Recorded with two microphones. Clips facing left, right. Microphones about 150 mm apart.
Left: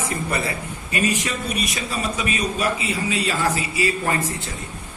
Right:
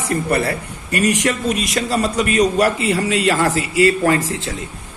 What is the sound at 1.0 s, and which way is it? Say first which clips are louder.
A man's voice: right 9 dB; 90° right.